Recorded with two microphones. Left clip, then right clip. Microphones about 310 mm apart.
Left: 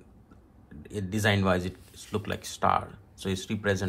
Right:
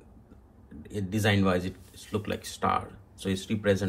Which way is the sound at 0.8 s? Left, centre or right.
Left.